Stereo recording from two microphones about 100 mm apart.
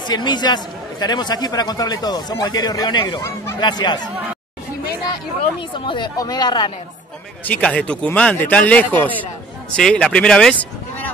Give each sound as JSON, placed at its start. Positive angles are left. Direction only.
{"t": 0.0, "sound": "a man's voice", "side_deg": 50}
{"t": 3.2, "sound": "speech", "side_deg": 30}
{"t": 3.5, "sound": "a man's voice", "side_deg": 45}
{"t": 5.6, "sound": "a man's voice", "side_deg": 55}
{"t": 7.4, "sound": "speech", "side_deg": 15}